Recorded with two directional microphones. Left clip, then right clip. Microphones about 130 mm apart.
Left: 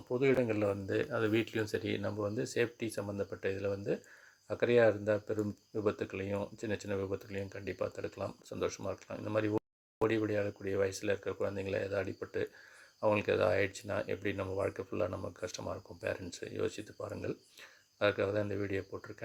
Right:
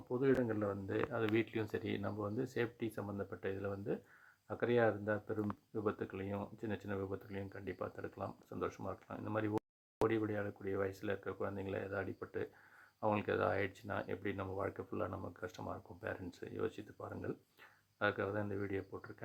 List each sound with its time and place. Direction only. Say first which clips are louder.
0.1 s speech: left 5 dB; 20° left (ahead or behind)